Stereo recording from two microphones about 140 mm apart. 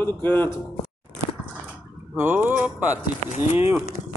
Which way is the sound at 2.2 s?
15° right (ahead or behind).